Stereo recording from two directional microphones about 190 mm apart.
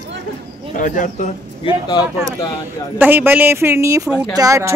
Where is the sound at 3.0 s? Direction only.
10° right (ahead or behind).